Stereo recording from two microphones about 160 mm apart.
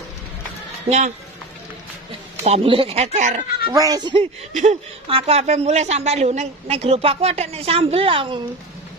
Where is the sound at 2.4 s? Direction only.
35° right (ahead or behind).